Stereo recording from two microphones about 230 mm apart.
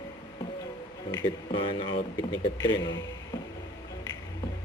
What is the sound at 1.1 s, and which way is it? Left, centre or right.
Speech, centre.